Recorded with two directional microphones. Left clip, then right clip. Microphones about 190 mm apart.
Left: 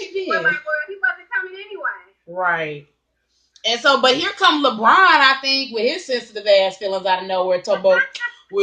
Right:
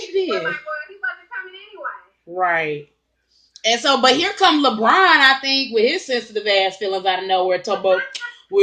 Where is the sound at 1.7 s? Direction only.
30° left (ahead or behind).